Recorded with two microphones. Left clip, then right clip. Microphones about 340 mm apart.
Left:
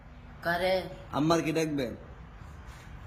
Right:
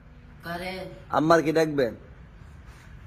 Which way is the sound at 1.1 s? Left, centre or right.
Centre.